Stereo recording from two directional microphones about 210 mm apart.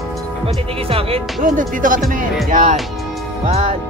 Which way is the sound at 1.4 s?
40° right (ahead or behind).